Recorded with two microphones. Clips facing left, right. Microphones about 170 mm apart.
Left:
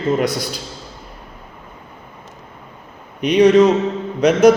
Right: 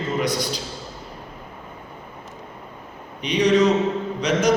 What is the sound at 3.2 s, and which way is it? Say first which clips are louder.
A man's voice: left 7 dB; 55° left (ahead or behind).